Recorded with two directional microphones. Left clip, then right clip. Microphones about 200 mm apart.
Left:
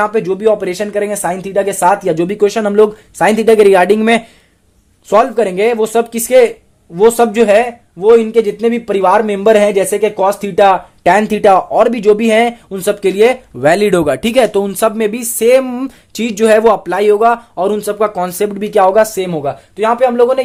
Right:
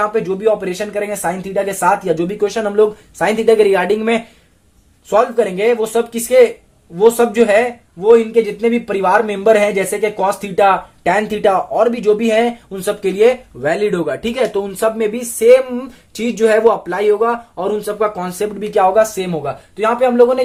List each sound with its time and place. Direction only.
0.0 s speech: 45° left (ahead or behind)